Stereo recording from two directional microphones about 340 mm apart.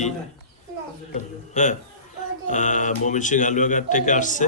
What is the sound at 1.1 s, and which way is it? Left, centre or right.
A man's voice, left.